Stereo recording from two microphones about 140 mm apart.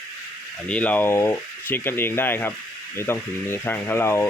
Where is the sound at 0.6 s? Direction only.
10° left (ahead or behind).